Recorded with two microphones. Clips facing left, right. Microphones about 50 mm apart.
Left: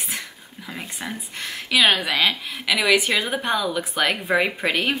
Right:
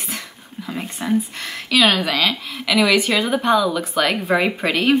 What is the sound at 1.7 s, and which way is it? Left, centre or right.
A woman's voice, centre.